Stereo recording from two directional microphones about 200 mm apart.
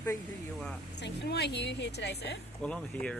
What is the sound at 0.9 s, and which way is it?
Speech, 60° left (ahead or behind).